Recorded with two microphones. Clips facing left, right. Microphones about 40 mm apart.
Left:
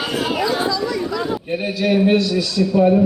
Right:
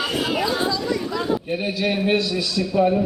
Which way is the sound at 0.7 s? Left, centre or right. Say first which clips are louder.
Left 2 dB; centre.